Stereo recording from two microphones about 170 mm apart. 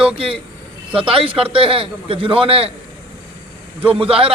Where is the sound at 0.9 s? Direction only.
35° right (ahead or behind).